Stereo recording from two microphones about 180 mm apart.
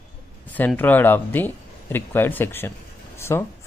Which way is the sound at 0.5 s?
10° left (ahead or behind).